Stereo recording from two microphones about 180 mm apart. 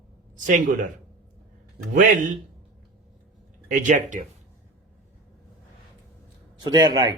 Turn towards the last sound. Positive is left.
turn(degrees=-25)  # may be behind; listen again after turning